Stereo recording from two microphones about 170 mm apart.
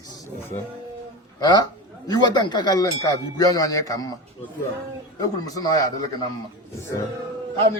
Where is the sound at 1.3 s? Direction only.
25° left (ahead or behind).